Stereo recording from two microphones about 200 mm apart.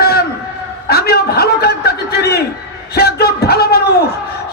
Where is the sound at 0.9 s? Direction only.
50° left (ahead or behind).